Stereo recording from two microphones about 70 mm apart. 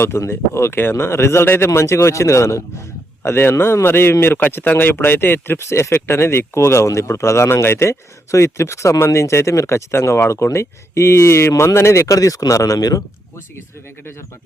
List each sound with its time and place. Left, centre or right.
0.0 s speech: left
4.4 s speech: left
13.6 s speech: left